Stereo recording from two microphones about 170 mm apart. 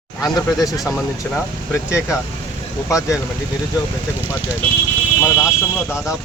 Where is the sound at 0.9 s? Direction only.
Centre (ahead or behind).